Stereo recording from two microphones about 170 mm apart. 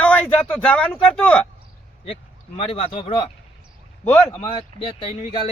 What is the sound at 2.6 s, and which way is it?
Speech, 35° left (ahead or behind).